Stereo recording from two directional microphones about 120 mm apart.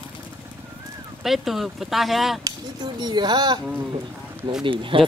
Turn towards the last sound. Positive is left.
turn(degrees=-45)  # may be behind; listen again after turning